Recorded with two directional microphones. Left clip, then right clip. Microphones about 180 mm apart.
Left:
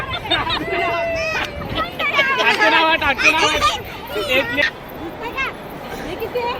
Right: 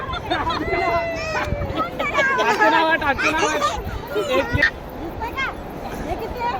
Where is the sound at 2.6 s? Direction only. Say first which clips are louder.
Left 1 dB; 30° right (ahead or behind).